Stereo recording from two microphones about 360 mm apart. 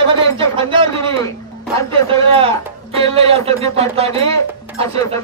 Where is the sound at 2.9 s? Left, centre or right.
Centre.